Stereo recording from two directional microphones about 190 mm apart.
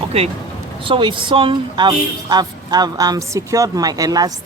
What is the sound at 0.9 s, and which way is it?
Speech, 25° right (ahead or behind).